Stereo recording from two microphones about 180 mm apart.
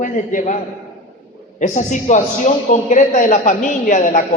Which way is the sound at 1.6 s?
45° left (ahead or behind).